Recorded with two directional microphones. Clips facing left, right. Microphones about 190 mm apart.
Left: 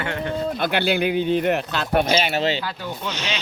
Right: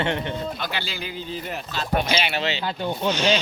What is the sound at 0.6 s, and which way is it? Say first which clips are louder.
Speech: left 10 dB; 55° left (ahead or behind).